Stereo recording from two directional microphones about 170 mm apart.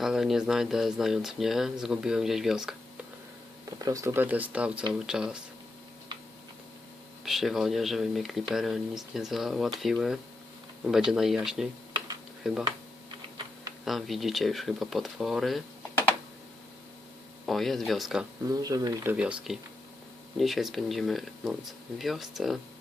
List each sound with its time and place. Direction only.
0.0 s speech: centre (ahead or behind)
3.8 s speech: 20° right (ahead or behind)
7.3 s speech: centre (ahead or behind)
13.8 s speech: centre (ahead or behind)
17.4 s speech: centre (ahead or behind)
18.5 s speech: 20° right (ahead or behind)
19.1 s speech: 5° right (ahead or behind)